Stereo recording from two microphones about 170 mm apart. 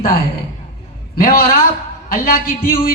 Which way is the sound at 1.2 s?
60° left (ahead or behind).